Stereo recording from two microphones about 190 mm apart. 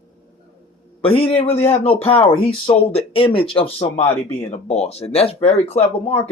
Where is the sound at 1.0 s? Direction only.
30° left (ahead or behind).